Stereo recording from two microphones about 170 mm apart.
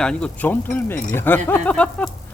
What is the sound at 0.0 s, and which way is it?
Speech, 5° left (ahead or behind).